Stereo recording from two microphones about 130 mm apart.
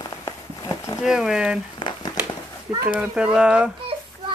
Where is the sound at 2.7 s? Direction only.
10° right (ahead or behind).